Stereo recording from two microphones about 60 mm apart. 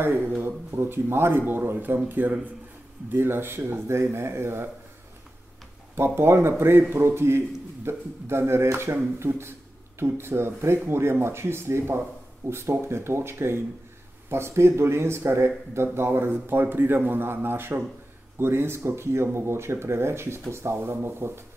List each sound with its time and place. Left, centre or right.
0.0 s a man's voice: right
5.9 s a man's voice: right